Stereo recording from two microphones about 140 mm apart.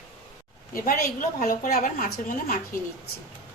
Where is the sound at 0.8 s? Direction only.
70° left (ahead or behind).